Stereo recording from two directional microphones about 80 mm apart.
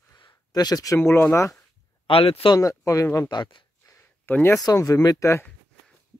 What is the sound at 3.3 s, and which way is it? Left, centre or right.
Speech, left.